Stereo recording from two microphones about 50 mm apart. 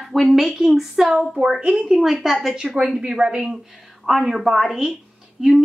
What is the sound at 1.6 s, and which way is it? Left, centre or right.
Speech, right.